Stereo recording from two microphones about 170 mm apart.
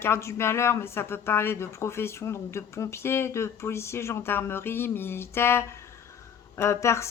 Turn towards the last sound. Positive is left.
turn(degrees=15)  # may be behind; listen again after turning